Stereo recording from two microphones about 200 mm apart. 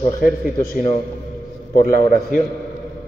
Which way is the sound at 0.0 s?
40° left (ahead or behind).